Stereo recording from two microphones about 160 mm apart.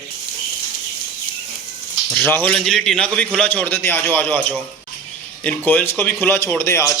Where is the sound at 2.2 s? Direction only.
10° left (ahead or behind).